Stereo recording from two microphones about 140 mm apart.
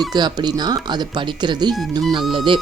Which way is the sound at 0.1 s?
30° right (ahead or behind).